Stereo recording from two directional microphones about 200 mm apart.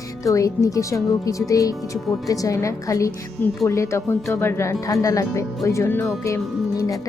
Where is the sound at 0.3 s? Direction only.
15° left (ahead or behind).